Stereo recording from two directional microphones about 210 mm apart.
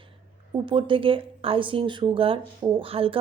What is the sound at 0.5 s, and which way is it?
Speech, 25° right (ahead or behind).